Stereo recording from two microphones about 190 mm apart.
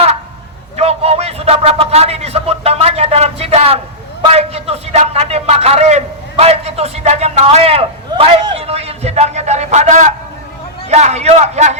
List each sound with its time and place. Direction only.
0.8 s a man's voice: 35° right (ahead or behind)